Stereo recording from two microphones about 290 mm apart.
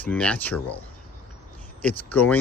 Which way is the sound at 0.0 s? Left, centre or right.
Centre.